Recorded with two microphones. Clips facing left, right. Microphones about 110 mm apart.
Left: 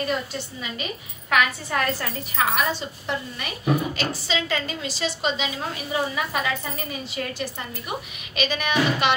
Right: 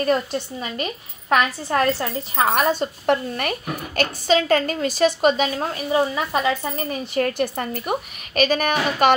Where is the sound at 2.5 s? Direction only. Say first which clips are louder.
Right 5 dB; 55° right (ahead or behind).